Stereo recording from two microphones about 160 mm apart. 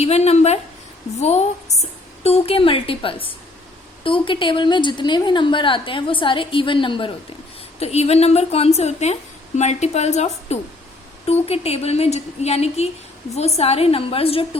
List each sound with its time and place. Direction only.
0.0 s a woman's voice: 40° left (ahead or behind)